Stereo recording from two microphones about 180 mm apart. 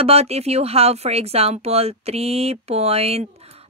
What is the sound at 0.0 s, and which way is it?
Speech, 35° right (ahead or behind).